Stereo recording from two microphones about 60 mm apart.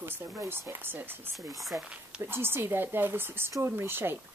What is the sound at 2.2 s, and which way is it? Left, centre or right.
A woman's voice, right.